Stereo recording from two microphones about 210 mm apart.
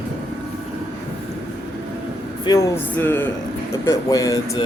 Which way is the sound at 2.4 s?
15° left (ahead or behind).